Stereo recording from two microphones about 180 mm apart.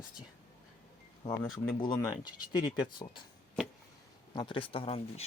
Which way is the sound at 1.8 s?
20° left (ahead or behind).